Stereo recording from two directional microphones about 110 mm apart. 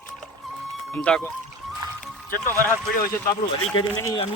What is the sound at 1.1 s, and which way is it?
Speech, 10° left (ahead or behind).